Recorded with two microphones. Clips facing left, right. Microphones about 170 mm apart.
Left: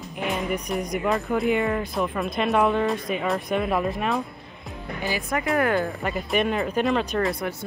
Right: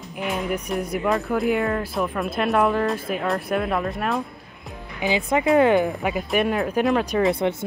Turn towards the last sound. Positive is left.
turn(degrees=-5)  # may be behind; listen again after turning